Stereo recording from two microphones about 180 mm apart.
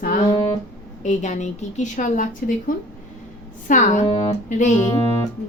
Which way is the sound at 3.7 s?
45° left (ahead or behind).